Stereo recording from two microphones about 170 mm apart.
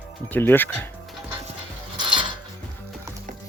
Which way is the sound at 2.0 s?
30° right (ahead or behind).